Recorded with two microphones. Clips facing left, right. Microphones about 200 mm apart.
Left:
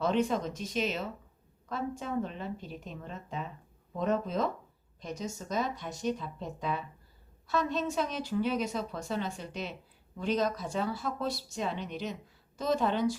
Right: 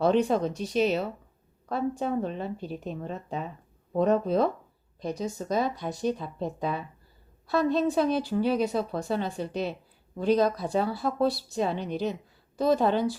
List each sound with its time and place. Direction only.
0.0 s speech: 35° right (ahead or behind)